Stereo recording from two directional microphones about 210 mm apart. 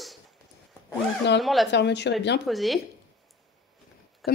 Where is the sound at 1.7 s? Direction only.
55° left (ahead or behind).